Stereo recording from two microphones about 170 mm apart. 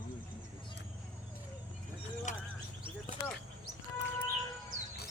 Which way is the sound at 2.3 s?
45° left (ahead or behind).